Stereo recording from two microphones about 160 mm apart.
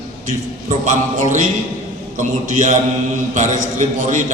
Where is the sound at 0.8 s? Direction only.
50° right (ahead or behind).